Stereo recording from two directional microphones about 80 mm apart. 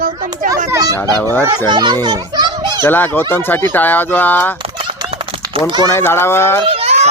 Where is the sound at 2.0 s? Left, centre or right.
Right.